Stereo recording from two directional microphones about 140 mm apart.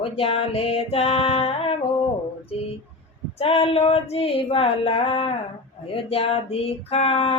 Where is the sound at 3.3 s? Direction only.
45° left (ahead or behind).